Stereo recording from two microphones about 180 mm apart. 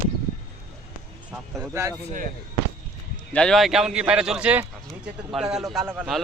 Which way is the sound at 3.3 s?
Centre (ahead or behind).